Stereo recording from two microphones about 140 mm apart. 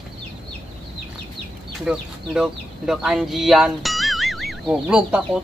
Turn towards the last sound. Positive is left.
turn(degrees=-5)  # may be behind; listen again after turning